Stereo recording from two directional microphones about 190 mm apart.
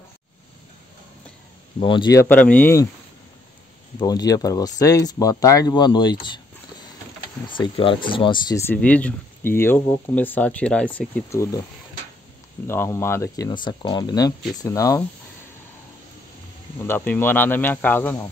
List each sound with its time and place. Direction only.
1.8 s speech: 25° left (ahead or behind)
2.2 s speech: 10° left (ahead or behind)
4.0 s speech: 20° left (ahead or behind)
7.4 s speech: 25° left (ahead or behind)
8.5 s speech: 10° left (ahead or behind)
12.6 s speech: 15° left (ahead or behind)
16.8 s speech: 10° left (ahead or behind)